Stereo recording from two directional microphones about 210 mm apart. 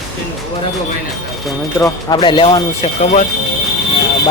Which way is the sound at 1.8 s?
20° left (ahead or behind).